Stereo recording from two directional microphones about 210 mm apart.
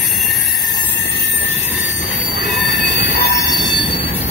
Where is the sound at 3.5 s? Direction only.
20° left (ahead or behind).